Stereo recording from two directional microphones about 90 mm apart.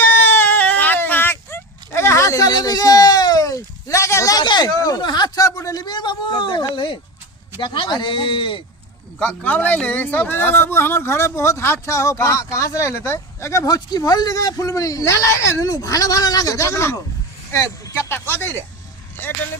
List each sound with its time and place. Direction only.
0.0 s a sound: 20° left (ahead or behind)
4.4 s speech: 50° left (ahead or behind); by 8.6 s 65° left (ahead or behind)
9.1 s speech: 15° left (ahead or behind)